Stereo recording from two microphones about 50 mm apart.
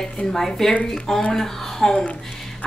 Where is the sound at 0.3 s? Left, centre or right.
Centre.